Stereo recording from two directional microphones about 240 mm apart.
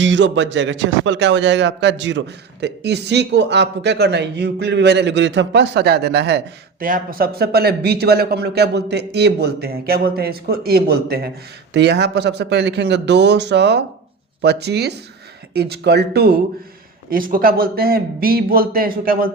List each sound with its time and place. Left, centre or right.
0.0 s a man's voice: right